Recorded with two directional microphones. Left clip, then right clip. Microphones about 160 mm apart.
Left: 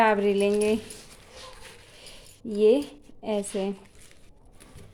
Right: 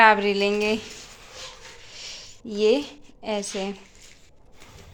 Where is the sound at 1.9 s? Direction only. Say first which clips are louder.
Right 9 dB; 25° left (ahead or behind).